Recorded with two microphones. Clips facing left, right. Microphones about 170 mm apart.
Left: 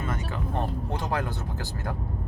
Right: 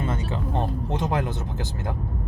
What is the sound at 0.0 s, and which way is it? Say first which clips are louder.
Vehicle: right 4 dB; 30° right (ahead or behind).